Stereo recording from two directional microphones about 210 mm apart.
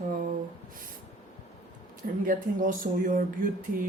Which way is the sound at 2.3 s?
40° right (ahead or behind).